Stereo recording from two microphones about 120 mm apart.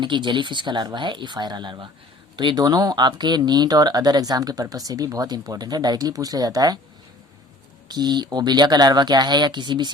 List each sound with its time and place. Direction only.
0.0 s speech: 40° right (ahead or behind)
7.9 s speech: 35° right (ahead or behind)